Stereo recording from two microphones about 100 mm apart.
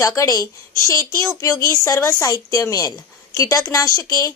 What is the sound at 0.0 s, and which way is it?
A woman's voice, 35° left (ahead or behind).